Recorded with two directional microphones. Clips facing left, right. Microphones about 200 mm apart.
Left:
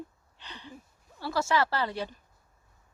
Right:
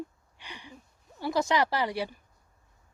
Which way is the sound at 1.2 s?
15° right (ahead or behind).